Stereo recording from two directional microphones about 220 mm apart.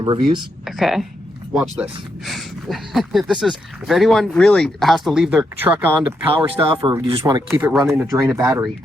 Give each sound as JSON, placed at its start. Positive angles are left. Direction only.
{"t": 0.0, "sound": "speech", "side_deg": -20}
{"t": 0.6, "sound": "speech", "side_deg": 0}
{"t": 6.3, "sound": "speech", "side_deg": -25}
{"t": 7.4, "sound": "speech", "side_deg": -5}